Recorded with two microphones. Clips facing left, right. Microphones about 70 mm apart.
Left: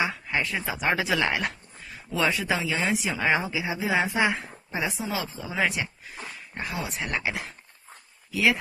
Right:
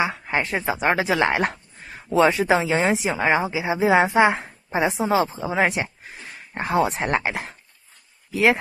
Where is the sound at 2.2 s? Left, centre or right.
Right.